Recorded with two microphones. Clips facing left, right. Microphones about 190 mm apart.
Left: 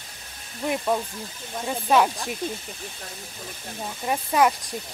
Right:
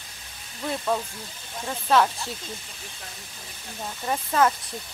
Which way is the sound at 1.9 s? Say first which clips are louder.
Left 1 dB; 15° left (ahead or behind).